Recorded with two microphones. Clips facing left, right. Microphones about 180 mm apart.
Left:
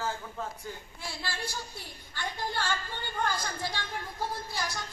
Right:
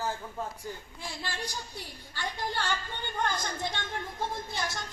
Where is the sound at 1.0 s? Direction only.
15° right (ahead or behind).